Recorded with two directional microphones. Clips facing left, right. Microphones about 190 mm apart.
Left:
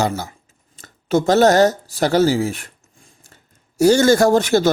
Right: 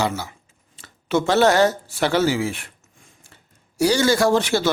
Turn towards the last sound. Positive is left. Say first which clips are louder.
# left 4 dB
turn(degrees=45)  # may be behind; listen again after turning